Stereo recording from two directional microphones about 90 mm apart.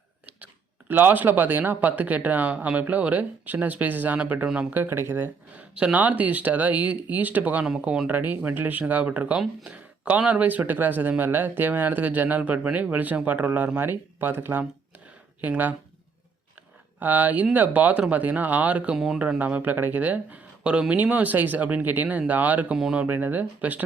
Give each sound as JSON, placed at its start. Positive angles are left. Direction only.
{"t": 0.3, "sound": "speech", "side_deg": -15}
{"t": 4.7, "sound": "speech", "side_deg": -25}
{"t": 17.0, "sound": "speech", "side_deg": -20}
{"t": 18.9, "sound": "speech", "side_deg": -5}
{"t": 19.4, "sound": "speech", "side_deg": -20}
{"t": 23.0, "sound": "speech", "side_deg": -20}